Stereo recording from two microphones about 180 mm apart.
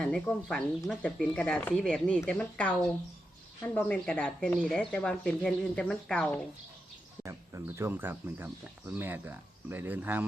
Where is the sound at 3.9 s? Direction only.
5° left (ahead or behind).